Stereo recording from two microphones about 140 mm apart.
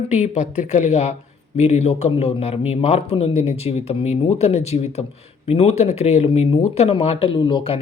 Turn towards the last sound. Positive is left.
turn(degrees=40)  # may be behind; listen again after turning